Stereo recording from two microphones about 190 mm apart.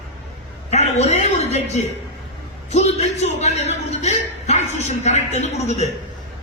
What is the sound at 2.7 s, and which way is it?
A man's voice, 35° left (ahead or behind).